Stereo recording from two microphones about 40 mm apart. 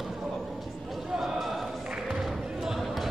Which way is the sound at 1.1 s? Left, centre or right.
Centre.